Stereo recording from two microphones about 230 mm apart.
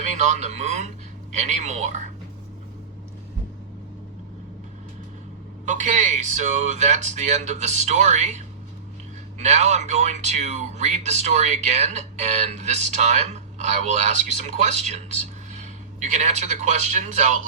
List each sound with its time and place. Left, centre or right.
0.0 s speech: right
5.6 s speech: right
9.4 s speech: right